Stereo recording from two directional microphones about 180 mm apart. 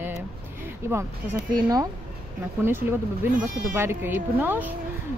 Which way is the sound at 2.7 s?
10° right (ahead or behind).